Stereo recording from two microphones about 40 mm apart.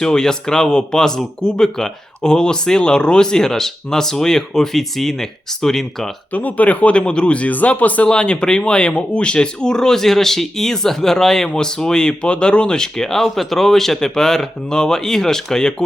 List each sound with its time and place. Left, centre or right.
0.0 s speech: centre
6.3 s speech: left
7.0 s speech: left
7.4 s speech: left
8.0 s speech: left